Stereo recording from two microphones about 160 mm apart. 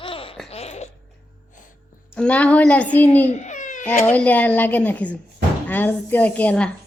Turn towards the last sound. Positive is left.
turn(degrees=10)  # may be behind; listen again after turning